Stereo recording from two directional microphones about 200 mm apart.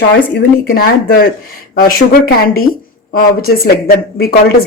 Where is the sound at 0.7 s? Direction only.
50° left (ahead or behind).